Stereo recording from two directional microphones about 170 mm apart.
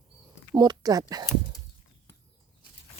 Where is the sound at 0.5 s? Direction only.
25° right (ahead or behind).